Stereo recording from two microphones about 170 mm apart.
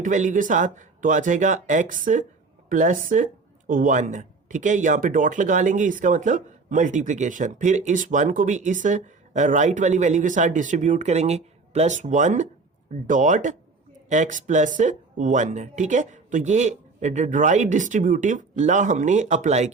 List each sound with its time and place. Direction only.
0.0 s speech: 45° right (ahead or behind)